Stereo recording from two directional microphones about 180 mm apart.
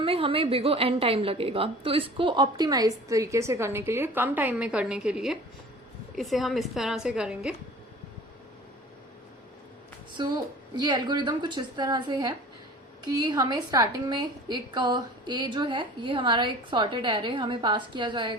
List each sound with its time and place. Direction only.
0.0 s a woman's voice: 30° right (ahead or behind); by 7.5 s 5° right (ahead or behind)
10.2 s a woman's voice: 25° right (ahead or behind)